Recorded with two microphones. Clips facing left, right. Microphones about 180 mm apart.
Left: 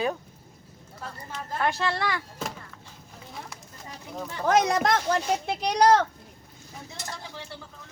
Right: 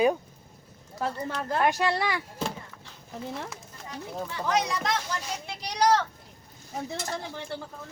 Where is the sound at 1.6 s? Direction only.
15° right (ahead or behind).